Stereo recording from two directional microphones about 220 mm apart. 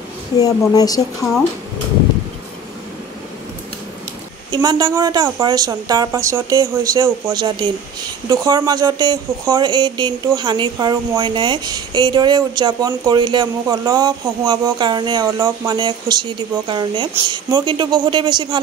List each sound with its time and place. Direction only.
0.4 s speech: 15° left (ahead or behind)
4.5 s a woman's voice: 20° right (ahead or behind)